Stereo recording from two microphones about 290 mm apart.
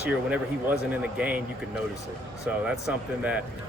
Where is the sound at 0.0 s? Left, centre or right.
Centre.